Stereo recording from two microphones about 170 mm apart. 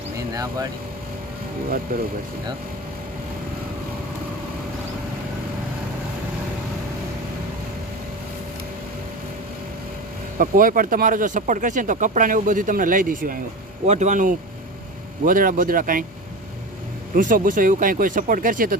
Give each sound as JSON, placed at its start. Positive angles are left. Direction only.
{"t": 0.3, "sound": "speech", "side_deg": -20}
{"t": 10.3, "sound": "speech", "side_deg": -55}
{"t": 13.8, "sound": "speech", "side_deg": -40}
{"t": 17.2, "sound": "speech", "side_deg": -50}